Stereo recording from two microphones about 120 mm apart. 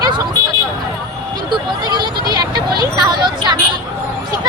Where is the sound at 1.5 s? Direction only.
35° right (ahead or behind).